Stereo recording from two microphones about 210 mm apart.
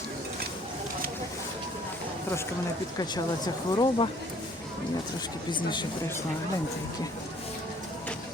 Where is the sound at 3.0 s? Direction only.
20° left (ahead or behind).